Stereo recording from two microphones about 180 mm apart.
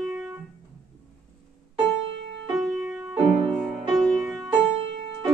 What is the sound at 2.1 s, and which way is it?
Music, 85° right.